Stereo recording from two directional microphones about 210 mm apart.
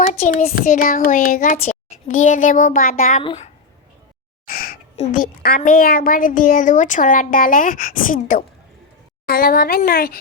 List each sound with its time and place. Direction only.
0.0 s a child's voice: 35° left (ahead or behind)
4.5 s a sound: 45° left (ahead or behind)
4.9 s a child's voice: 40° left (ahead or behind)